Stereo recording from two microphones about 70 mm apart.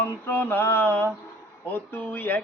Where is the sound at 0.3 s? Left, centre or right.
Left.